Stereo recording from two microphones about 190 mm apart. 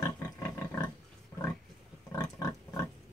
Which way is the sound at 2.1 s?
20° left (ahead or behind).